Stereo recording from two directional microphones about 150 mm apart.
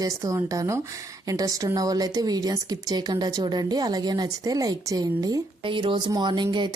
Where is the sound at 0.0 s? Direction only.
25° right (ahead or behind).